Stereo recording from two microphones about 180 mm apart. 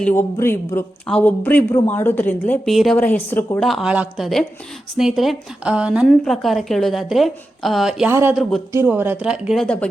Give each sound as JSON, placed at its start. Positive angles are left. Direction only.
{"t": 0.0, "sound": "a woman's voice", "side_deg": 15}
{"t": 8.1, "sound": "a woman's voice", "side_deg": -15}
{"t": 8.4, "sound": "a woman's voice", "side_deg": 0}
{"t": 8.7, "sound": "a woman's voice", "side_deg": -10}